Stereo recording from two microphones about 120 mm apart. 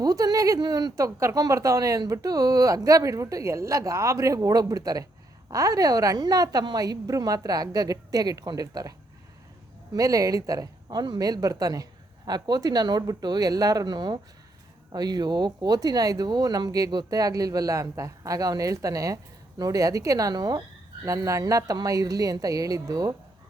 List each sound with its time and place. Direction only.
0.0 s speech: 35° right (ahead or behind)
9.9 s speech: 30° right (ahead or behind)